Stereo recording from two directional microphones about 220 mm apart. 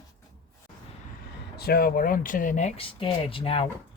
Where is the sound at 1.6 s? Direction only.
45° left (ahead or behind); by 3.6 s 25° left (ahead or behind).